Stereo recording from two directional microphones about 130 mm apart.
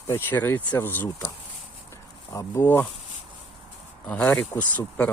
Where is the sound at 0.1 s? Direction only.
15° left (ahead or behind).